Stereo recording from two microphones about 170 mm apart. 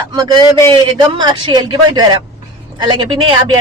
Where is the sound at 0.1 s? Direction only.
25° right (ahead or behind).